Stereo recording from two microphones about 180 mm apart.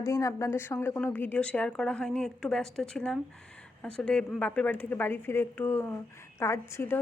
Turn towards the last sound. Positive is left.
turn(degrees=15)  # may be behind; listen again after turning